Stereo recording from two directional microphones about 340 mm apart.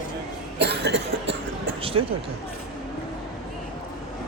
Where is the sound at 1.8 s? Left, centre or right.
Centre.